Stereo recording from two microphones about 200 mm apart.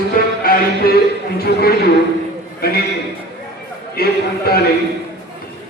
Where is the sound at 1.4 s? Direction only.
50° left (ahead or behind).